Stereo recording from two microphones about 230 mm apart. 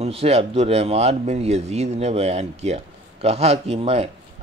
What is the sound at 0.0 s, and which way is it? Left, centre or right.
Speech, right.